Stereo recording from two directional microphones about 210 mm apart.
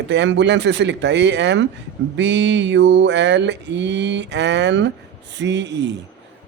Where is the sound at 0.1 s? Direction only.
55° right (ahead or behind).